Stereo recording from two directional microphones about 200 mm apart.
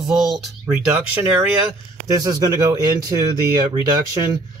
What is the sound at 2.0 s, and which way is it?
Speech, 20° right (ahead or behind).